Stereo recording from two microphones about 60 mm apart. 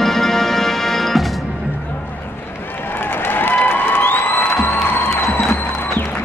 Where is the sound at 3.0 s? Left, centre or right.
Left.